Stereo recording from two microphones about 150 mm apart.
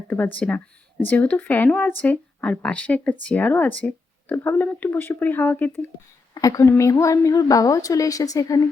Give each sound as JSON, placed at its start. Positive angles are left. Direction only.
{"t": 0.3, "sound": "speech", "side_deg": 10}
{"t": 6.3, "sound": "a woman's voice", "side_deg": 25}